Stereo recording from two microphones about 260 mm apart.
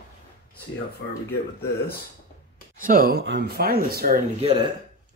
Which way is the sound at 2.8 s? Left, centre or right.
Right.